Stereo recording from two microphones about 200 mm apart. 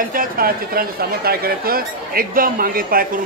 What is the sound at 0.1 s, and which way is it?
Speech, 45° right (ahead or behind).